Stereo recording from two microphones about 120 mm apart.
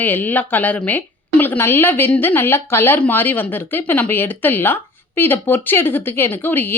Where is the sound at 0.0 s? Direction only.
15° left (ahead or behind).